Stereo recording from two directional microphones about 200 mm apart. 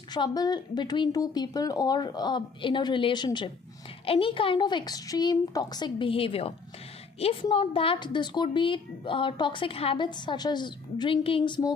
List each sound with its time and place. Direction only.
0.1 s a woman's voice: 20° left (ahead or behind)